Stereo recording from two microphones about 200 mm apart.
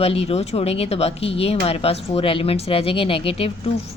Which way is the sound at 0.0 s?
30° left (ahead or behind).